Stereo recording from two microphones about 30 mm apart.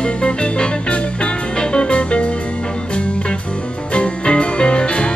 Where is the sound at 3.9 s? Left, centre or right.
Left.